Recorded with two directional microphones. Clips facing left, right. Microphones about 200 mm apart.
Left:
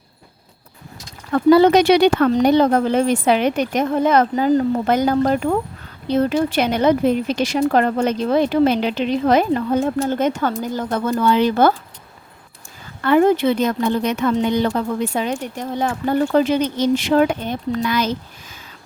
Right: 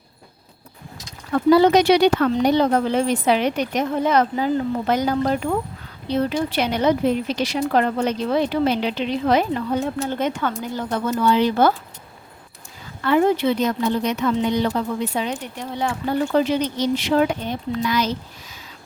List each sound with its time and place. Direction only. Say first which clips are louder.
1.5 s speech: left 2 dB; 60° left (ahead or behind)
13.0 s speech: left 3 dB; 55° left (ahead or behind)